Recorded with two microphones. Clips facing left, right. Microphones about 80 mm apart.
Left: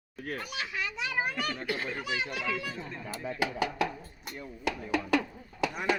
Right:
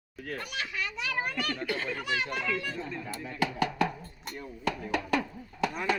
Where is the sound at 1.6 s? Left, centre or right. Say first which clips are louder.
Right 1 dB; centre.